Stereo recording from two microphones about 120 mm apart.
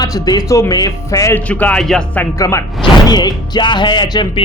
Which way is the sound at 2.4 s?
25° left (ahead or behind).